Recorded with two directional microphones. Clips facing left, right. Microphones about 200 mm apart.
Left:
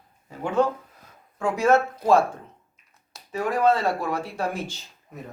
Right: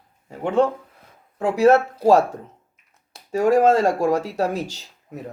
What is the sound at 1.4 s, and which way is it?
Speech, 35° right (ahead or behind).